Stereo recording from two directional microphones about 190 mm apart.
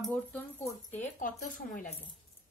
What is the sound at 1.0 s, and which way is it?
Speech, 45° left (ahead or behind).